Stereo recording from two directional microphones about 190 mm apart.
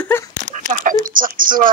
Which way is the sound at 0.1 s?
10° left (ahead or behind).